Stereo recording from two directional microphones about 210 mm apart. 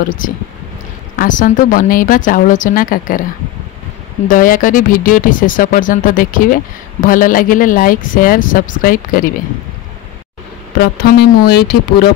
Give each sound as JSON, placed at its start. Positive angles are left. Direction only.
{"t": 1.1, "sound": "speech", "side_deg": 40}
{"t": 4.3, "sound": "speech", "side_deg": 40}
{"t": 10.8, "sound": "speech", "side_deg": 50}